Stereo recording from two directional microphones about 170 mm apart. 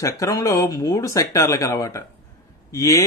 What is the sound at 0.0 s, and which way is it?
Mantra, 20° left (ahead or behind).